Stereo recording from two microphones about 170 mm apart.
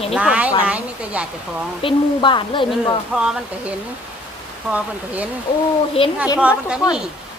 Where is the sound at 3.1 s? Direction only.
5° right (ahead or behind).